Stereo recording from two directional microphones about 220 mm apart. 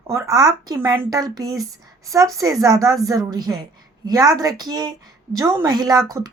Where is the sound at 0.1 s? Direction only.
15° right (ahead or behind).